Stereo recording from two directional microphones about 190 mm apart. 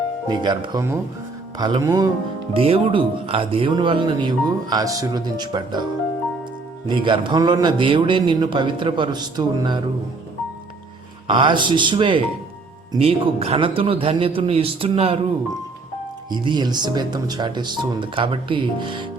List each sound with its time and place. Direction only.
0.3 s speech: 25° right (ahead or behind)
2.5 s speech: 30° right (ahead or behind)
6.8 s speech: 25° right (ahead or behind)
11.3 s speech: 25° right (ahead or behind)
16.3 s speech: 25° right (ahead or behind)